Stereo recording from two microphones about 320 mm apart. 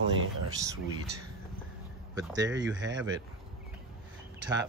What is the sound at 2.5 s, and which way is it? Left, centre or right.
Speech, right.